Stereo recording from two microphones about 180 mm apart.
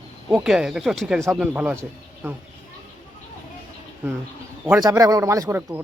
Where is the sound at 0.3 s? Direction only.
5° right (ahead or behind).